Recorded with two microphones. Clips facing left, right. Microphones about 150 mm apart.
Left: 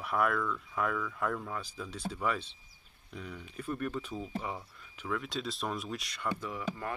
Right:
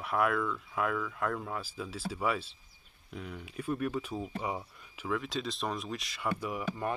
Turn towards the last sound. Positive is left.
turn(degrees=-20)  # may be behind; listen again after turning